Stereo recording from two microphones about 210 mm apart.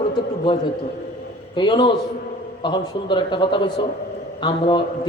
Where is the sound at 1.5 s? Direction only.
20° left (ahead or behind).